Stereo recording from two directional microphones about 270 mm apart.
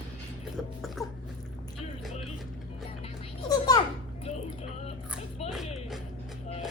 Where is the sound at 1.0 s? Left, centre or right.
Centre.